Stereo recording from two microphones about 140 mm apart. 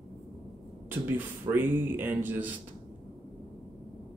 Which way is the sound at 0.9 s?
15° right (ahead or behind).